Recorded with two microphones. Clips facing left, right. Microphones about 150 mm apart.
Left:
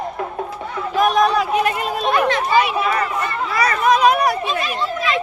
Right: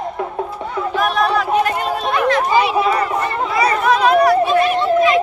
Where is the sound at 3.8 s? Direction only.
15° left (ahead or behind).